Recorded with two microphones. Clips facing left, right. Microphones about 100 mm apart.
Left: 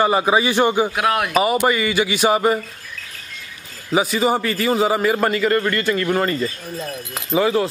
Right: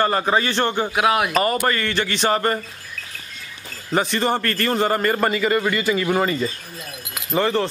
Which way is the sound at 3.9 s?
5° left (ahead or behind).